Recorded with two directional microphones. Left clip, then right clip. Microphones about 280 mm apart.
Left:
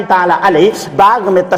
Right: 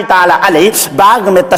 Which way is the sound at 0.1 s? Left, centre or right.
Right.